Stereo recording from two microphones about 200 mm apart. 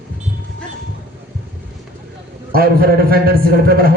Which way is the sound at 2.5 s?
50° right (ahead or behind).